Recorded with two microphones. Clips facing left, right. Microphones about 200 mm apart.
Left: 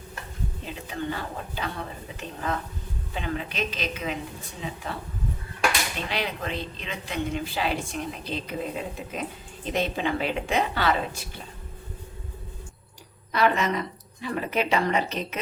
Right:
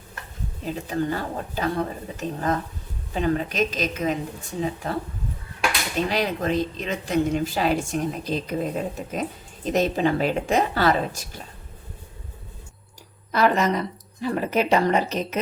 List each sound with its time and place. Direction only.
0.6 s speech: 40° right (ahead or behind)
6.1 s speech: 40° right (ahead or behind)
13.3 s speech: 40° right (ahead or behind)